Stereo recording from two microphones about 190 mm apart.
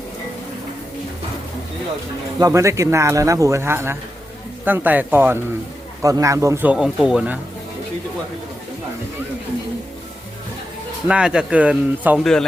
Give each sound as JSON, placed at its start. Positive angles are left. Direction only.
{"t": 2.4, "sound": "speech", "side_deg": -15}
{"t": 11.1, "sound": "speech", "side_deg": -5}